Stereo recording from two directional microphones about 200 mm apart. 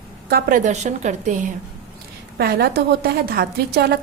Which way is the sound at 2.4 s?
50° right (ahead or behind).